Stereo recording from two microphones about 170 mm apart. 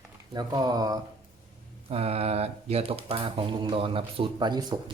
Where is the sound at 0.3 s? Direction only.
20° right (ahead or behind).